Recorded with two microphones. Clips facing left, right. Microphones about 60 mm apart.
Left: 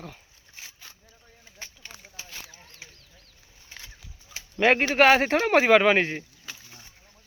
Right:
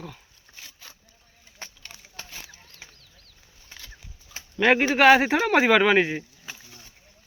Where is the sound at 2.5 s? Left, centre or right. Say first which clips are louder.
Left 1 dB; left.